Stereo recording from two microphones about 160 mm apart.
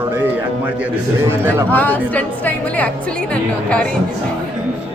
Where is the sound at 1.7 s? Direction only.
10° left (ahead or behind).